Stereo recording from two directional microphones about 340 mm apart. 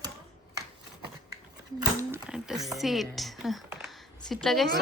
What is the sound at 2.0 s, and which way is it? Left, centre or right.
Speech, centre.